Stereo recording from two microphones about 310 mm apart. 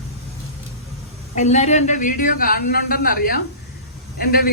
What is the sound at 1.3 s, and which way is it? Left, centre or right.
A woman's voice, left.